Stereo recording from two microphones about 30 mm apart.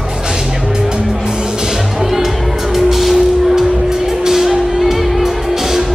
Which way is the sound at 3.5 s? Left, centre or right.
Centre.